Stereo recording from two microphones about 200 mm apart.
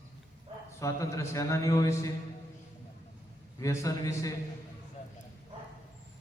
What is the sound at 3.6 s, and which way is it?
Speech, 15° left (ahead or behind).